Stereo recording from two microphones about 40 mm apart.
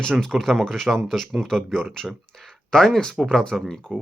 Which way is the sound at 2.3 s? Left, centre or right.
Centre.